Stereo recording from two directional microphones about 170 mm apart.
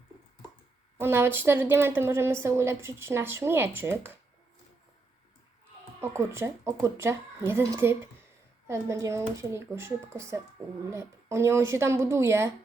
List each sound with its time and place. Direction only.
0.9 s a woman's voice: 15° right (ahead or behind)
6.0 s a woman's voice: 15° right (ahead or behind)